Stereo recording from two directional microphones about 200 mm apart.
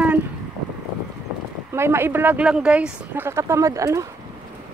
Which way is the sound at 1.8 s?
10° right (ahead or behind).